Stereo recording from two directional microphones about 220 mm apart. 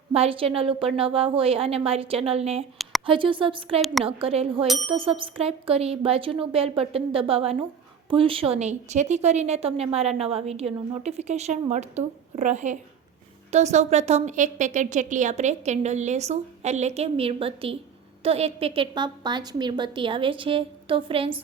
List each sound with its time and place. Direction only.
0.1 s a woman's voice: 25° right (ahead or behind)
3.8 s bicycle bell: centre (ahead or behind)
4.0 s a woman's voice: 25° right (ahead or behind)
4.6 s bicycle bell: centre (ahead or behind)
4.9 s a woman's voice: 25° right (ahead or behind)